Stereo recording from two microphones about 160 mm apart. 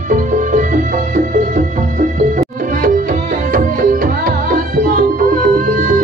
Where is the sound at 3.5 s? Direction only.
60° right (ahead or behind).